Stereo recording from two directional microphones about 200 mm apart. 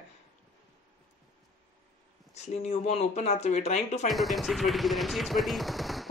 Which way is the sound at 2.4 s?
35° left (ahead or behind).